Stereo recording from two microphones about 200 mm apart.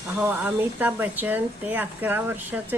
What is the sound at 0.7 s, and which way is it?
Speech, 10° right (ahead or behind).